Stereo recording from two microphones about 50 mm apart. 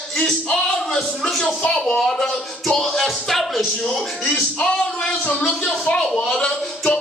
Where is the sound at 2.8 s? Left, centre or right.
Centre.